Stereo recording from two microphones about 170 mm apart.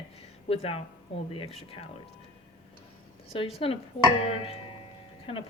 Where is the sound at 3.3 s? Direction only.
35° left (ahead or behind).